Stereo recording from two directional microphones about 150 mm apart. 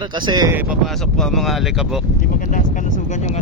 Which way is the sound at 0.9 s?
5° left (ahead or behind).